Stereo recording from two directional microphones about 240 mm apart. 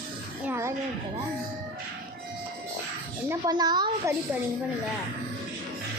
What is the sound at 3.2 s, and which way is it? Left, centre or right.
Speech, centre.